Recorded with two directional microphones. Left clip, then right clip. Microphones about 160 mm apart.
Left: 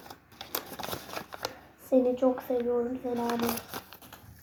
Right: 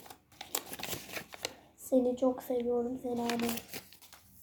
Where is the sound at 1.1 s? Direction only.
20° right (ahead or behind).